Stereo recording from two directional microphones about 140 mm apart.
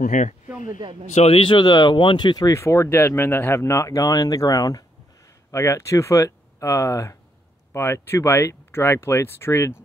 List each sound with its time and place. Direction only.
0.0 s speech: 60° left (ahead or behind)
0.7 s a man's voice: 30° right (ahead or behind)
1.1 s speech: 45° left (ahead or behind); by 9.8 s 20° left (ahead or behind)